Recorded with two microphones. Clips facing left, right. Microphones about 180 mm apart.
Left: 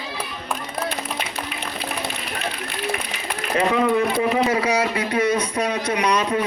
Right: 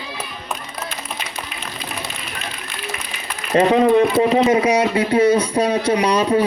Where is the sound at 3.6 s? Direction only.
35° right (ahead or behind).